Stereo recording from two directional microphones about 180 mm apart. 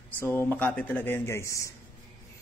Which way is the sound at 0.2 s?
10° left (ahead or behind).